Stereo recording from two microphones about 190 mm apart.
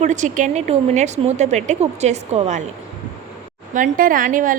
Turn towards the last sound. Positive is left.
turn(degrees=-45)  # may be behind; listen again after turning